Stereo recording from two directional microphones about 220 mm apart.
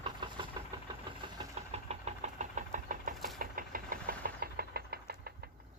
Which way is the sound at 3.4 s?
40° right (ahead or behind).